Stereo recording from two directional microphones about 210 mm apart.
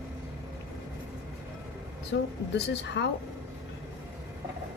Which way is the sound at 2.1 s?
55° left (ahead or behind).